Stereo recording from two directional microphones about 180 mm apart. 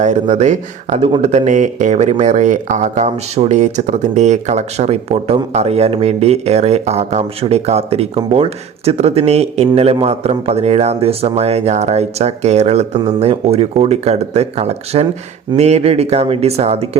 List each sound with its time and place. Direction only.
0.0 s speech: 40° right (ahead or behind)